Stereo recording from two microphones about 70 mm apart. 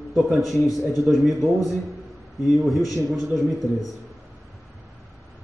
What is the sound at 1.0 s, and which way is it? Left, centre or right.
A man's voice, centre.